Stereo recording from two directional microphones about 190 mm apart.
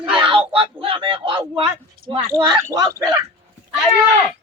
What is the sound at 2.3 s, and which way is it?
Speech, 20° right (ahead or behind).